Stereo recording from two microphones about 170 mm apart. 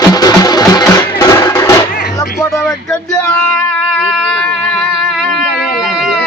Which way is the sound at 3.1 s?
10° left (ahead or behind).